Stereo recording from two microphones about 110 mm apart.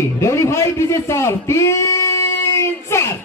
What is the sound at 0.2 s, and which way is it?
A man's voice, 25° left (ahead or behind).